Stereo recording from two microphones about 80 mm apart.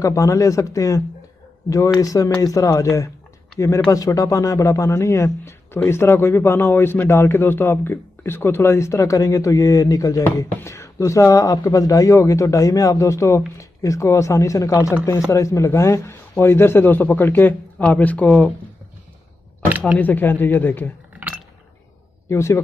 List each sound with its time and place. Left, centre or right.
0.0 s a man's voice: left; by 18.3 s centre
20.0 s speech: left
22.3 s a man's voice: left